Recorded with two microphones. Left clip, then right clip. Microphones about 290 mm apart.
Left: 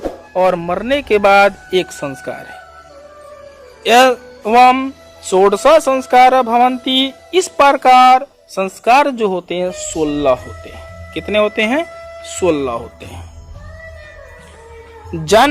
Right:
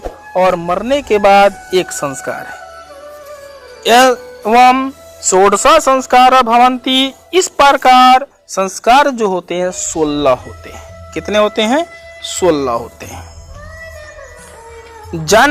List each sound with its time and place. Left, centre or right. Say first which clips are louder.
0.0 s speech: right 2 dB; centre
3.8 s speech: right 1 dB; centre